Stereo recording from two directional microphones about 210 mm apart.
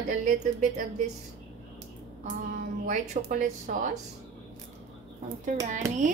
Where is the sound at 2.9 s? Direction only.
35° right (ahead or behind).